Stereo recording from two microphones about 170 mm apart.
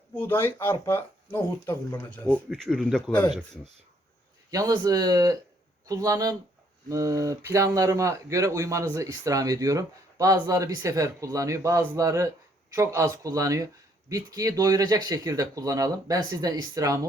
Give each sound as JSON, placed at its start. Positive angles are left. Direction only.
{"t": 0.1, "sound": "speech", "side_deg": 10}
{"t": 4.5, "sound": "speech", "side_deg": -20}